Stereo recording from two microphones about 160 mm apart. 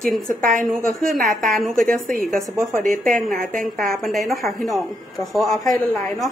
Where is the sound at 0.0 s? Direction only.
5° left (ahead or behind).